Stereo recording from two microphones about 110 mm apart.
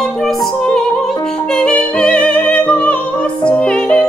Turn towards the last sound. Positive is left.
turn(degrees=10)  # may be behind; listen again after turning